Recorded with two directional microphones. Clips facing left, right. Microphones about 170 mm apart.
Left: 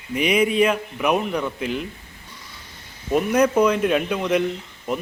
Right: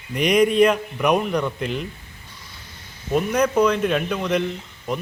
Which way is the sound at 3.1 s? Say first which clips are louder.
Left 2 dB; 5° left (ahead or behind).